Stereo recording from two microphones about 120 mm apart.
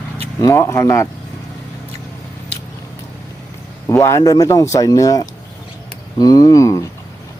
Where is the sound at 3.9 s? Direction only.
25° left (ahead or behind).